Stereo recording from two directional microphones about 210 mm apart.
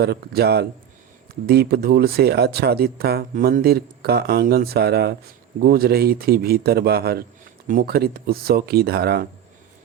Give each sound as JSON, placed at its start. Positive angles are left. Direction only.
{"t": 0.0, "sound": "speech", "side_deg": -50}